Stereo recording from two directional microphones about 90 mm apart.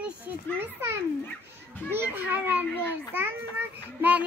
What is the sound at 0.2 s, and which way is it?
A child's voice, 25° right (ahead or behind).